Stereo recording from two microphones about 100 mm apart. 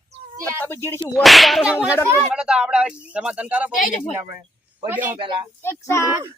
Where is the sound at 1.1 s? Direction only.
Centre (ahead or behind).